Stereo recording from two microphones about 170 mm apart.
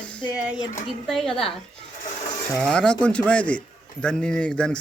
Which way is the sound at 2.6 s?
5° left (ahead or behind).